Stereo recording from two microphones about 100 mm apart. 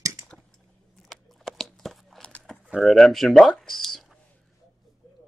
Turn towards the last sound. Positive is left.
turn(degrees=0)  # may be behind; listen again after turning